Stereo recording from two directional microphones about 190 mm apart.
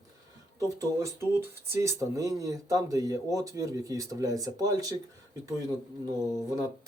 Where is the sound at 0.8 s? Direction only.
15° right (ahead or behind).